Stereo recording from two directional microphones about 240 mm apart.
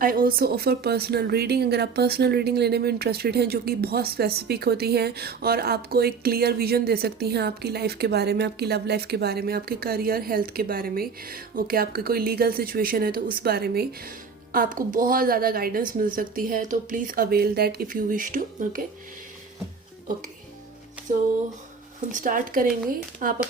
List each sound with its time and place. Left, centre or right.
0.0 s speech: right
22.1 s speech: right